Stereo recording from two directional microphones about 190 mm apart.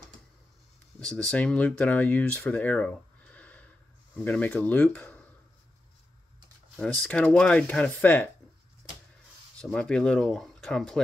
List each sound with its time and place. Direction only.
0.9 s speech: 5° left (ahead or behind)
6.8 s speech: 5° left (ahead or behind)
9.6 s speech: 5° left (ahead or behind)